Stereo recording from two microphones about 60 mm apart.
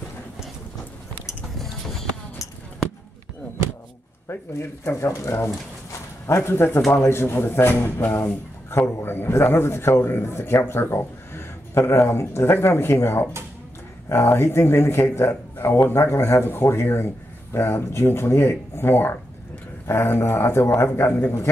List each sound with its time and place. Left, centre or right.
1.6 s music: centre
4.3 s speech: left
5.9 s a sound: left
7.1 s a man's voice: left